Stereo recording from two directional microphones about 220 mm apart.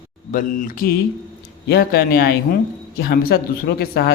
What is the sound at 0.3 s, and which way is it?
Speech, 35° left (ahead or behind).